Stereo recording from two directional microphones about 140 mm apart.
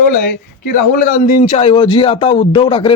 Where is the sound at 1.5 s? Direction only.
45° left (ahead or behind).